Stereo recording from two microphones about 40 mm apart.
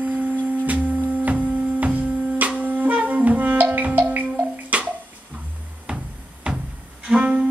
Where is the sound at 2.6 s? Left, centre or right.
Right.